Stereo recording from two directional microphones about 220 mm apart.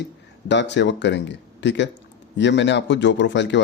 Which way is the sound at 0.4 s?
55° left (ahead or behind).